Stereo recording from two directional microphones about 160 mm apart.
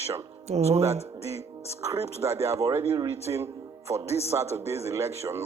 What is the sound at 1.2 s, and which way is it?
Speech, 40° left (ahead or behind).